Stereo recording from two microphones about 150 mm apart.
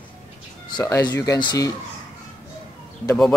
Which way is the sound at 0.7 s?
25° left (ahead or behind).